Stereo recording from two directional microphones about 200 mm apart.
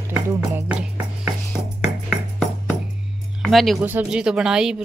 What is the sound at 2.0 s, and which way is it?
Music, centre (ahead or behind).